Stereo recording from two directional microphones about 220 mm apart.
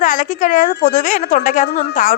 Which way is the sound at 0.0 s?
35° left (ahead or behind).